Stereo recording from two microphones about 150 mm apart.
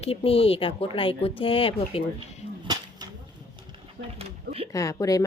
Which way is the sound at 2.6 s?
25° right (ahead or behind).